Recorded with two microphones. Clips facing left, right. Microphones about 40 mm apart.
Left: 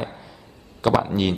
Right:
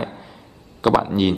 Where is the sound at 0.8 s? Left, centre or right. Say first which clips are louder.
Right 3 dB; centre.